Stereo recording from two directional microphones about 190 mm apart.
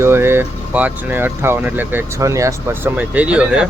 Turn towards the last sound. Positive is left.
turn(degrees=-5)  # may be behind; listen again after turning